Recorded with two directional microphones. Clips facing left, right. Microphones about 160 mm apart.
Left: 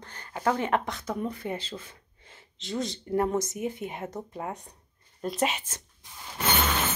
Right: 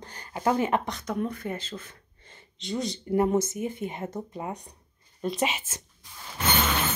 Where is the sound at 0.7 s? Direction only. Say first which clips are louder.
Even; centre (ahead or behind).